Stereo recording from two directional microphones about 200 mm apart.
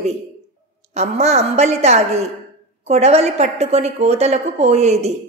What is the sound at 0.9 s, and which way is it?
A woman's voice, 30° right (ahead or behind).